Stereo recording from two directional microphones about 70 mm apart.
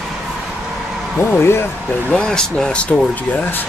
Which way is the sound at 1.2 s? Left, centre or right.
Left.